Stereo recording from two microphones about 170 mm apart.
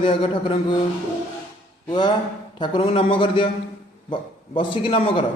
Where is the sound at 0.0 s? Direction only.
30° left (ahead or behind).